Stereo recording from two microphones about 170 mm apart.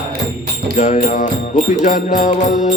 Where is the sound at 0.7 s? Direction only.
40° left (ahead or behind).